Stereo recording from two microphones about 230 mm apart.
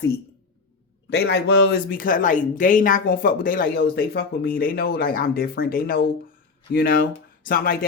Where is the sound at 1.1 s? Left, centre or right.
Left.